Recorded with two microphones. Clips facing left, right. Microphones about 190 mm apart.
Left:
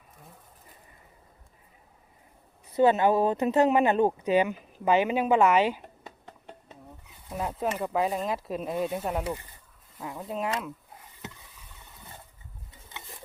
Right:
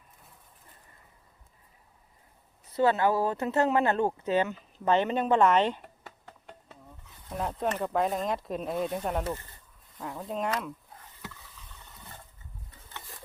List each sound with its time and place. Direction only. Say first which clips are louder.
2.7 s speech: left 3 dB; 20° left (ahead or behind)
7.3 s speech: left 1 dB; 5° left (ahead or behind)
12.9 s patter: left 1 dB; 20° left (ahead or behind)